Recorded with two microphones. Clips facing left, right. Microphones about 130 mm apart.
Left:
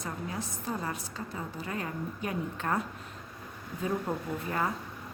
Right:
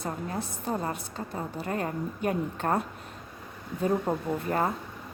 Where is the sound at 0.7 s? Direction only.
30° right (ahead or behind).